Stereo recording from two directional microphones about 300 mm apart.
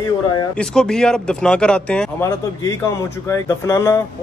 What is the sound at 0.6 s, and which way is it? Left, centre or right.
Speech, centre.